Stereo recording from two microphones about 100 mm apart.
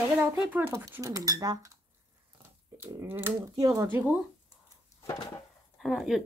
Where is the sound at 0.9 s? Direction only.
35° right (ahead or behind).